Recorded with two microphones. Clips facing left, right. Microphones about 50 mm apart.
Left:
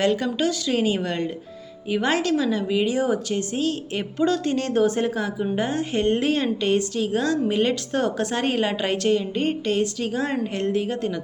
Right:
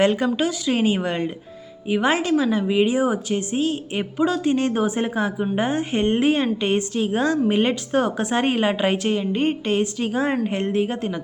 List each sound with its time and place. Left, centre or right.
0.0 s a woman's voice: right